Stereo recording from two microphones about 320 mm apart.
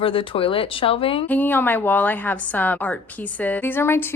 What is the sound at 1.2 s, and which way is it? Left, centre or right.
A woman's voice, centre.